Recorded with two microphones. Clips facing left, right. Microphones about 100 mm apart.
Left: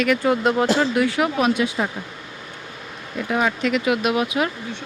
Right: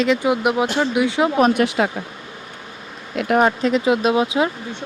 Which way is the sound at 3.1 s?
70° right (ahead or behind).